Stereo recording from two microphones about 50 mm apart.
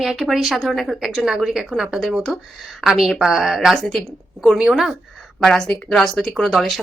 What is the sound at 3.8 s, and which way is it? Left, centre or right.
Speech, centre.